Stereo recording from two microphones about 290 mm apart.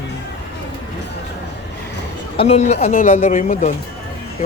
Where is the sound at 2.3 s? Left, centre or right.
Left.